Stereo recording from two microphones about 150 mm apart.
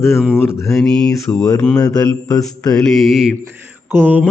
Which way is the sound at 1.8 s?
25° left (ahead or behind).